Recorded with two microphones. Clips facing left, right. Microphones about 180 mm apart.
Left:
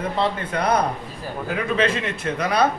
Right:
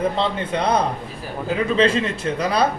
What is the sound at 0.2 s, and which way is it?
A man's voice, 25° right (ahead or behind).